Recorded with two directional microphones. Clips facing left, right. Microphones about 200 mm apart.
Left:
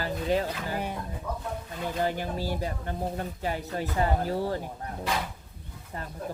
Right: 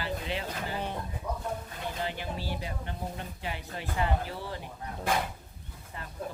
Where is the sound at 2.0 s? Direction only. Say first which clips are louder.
Left 8 dB; 45° left (ahead or behind).